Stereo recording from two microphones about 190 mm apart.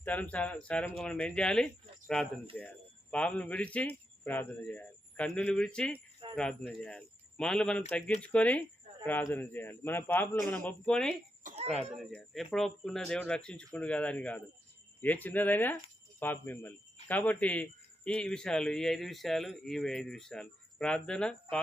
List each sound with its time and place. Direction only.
0.0 s a man's voice: 10° left (ahead or behind)
11.4 s cough: 35° right (ahead or behind)
11.9 s a man's voice: centre (ahead or behind)